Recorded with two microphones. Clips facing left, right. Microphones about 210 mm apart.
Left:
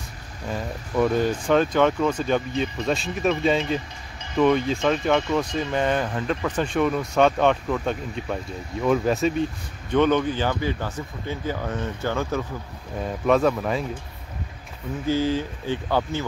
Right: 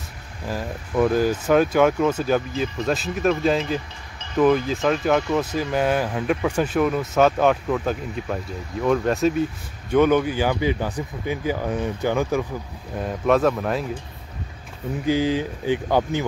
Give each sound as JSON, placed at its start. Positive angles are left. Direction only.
{"t": 0.5, "sound": "speech", "side_deg": -5}
{"t": 9.9, "sound": "speech", "side_deg": -10}
{"t": 12.9, "sound": "speech", "side_deg": 0}
{"t": 15.0, "sound": "speech", "side_deg": -15}